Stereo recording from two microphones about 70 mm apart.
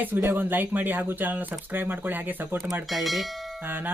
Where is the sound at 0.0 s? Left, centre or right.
Right.